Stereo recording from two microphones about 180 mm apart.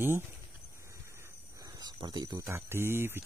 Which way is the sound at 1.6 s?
25° right (ahead or behind).